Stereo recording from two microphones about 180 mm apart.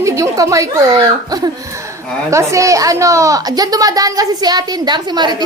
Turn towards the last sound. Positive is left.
turn(degrees=-25)  # may be behind; listen again after turning